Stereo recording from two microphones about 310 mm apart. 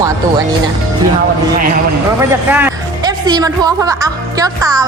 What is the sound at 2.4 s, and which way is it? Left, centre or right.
Speech, centre.